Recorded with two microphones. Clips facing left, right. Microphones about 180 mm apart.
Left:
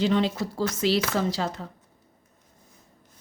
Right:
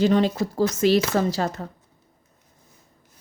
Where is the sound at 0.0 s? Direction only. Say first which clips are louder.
Right 4 dB; 45° right (ahead or behind).